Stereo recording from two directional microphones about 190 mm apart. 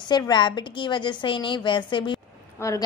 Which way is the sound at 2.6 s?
15° left (ahead or behind).